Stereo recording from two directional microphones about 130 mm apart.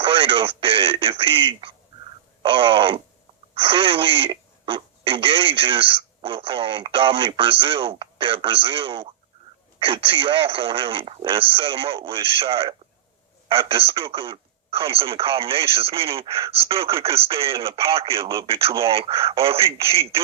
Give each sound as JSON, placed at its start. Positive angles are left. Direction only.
{"t": 0.0, "sound": "speech", "side_deg": -45}